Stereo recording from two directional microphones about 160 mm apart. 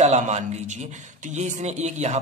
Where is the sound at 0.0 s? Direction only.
45° right (ahead or behind).